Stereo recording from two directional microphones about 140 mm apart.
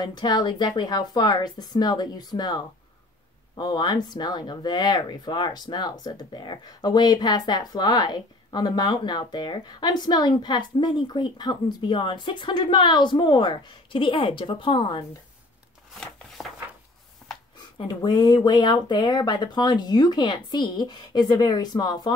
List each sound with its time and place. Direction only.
0.0 s a woman's voice: 30° left (ahead or behind)
16.0 s a sound: centre (ahead or behind)
17.7 s speech: 35° left (ahead or behind)